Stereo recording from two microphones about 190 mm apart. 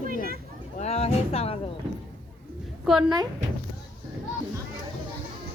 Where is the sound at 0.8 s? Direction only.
35° left (ahead or behind).